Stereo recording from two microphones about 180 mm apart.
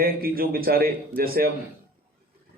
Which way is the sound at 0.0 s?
55° right (ahead or behind).